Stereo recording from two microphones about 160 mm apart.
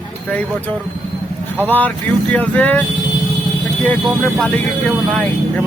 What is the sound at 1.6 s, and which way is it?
Speech, 10° left (ahead or behind).